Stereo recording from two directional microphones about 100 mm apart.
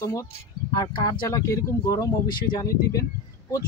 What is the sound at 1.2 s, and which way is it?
Speech, 35° left (ahead or behind).